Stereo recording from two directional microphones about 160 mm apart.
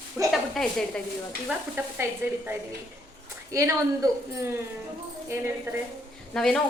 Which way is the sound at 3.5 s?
20° right (ahead or behind).